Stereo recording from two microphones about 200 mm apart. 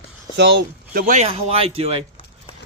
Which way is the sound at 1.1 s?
35° right (ahead or behind).